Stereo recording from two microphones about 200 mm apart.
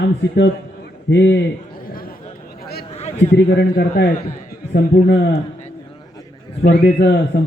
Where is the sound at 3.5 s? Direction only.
60° left (ahead or behind).